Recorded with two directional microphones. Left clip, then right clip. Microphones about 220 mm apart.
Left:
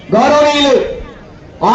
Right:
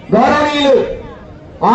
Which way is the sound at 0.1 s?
50° left (ahead or behind).